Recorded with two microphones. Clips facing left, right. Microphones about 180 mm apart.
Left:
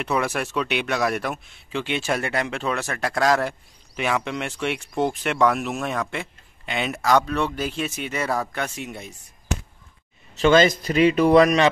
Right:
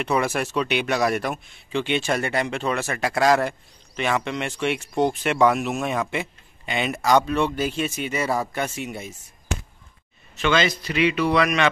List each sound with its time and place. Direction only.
0.0 s speech: centre (ahead or behind)
10.3 s a man's voice: 40° left (ahead or behind)